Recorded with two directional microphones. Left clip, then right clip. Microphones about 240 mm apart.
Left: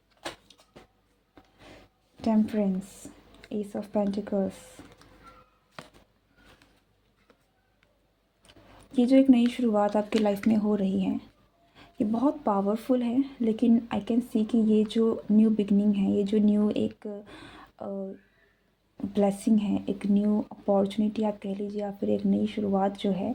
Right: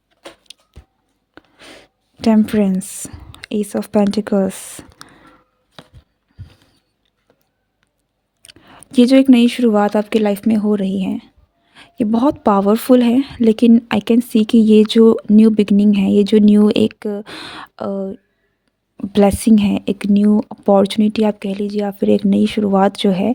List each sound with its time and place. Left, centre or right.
1.4 s a sound: right
2.2 s a woman's voice: right
8.4 s speech: right